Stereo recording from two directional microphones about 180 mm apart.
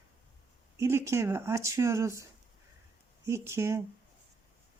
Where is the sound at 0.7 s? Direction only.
15° right (ahead or behind).